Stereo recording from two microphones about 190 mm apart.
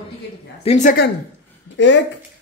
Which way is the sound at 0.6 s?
40° left (ahead or behind).